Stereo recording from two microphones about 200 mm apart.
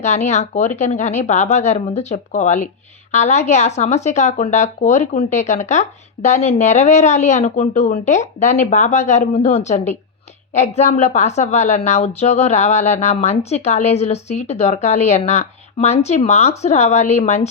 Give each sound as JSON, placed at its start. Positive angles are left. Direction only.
{"t": 0.0, "sound": "a woman's voice", "side_deg": 35}